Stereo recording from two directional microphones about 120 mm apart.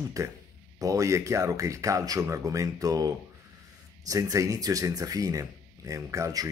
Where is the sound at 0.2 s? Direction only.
25° right (ahead or behind).